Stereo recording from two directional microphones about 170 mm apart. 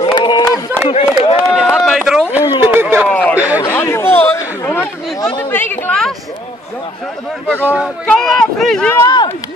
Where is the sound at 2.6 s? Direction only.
10° right (ahead or behind).